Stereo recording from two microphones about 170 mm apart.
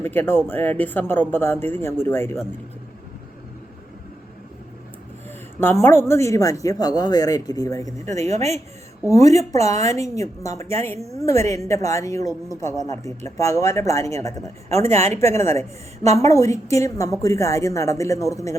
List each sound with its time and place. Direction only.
0.0 s speech: 10° left (ahead or behind)
5.5 s speech: 15° left (ahead or behind)
8.1 s speech: 40° right (ahead or behind)
9.0 s speech: 20° left (ahead or behind)